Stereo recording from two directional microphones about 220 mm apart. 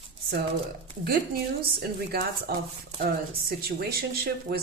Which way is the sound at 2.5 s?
45° right (ahead or behind).